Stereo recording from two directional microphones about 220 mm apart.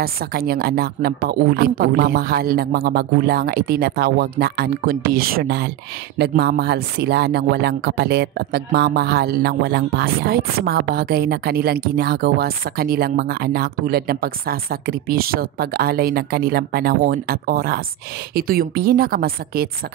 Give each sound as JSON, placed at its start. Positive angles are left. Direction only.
{"t": 0.0, "sound": "speech", "side_deg": -45}